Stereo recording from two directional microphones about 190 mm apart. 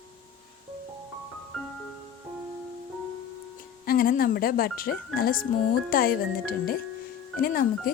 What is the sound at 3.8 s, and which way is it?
Speech, 50° left (ahead or behind).